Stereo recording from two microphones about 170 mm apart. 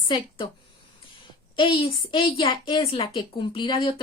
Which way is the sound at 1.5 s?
30° left (ahead or behind).